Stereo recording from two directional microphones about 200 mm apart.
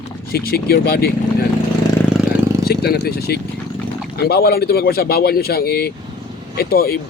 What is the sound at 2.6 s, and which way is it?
Speech, 50° left (ahead or behind).